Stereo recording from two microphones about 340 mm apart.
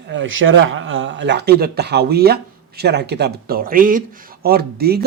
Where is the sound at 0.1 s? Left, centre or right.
Right.